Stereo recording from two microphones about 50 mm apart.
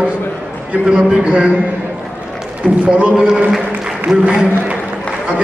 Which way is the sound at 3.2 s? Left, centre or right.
Centre.